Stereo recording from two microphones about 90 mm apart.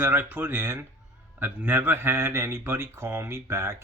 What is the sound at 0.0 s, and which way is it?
Speech, 25° right (ahead or behind).